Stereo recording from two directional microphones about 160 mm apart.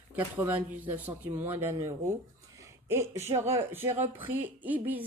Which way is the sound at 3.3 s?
15° right (ahead or behind).